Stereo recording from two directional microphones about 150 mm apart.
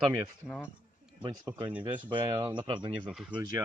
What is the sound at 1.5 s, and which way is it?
Speech, 15° right (ahead or behind).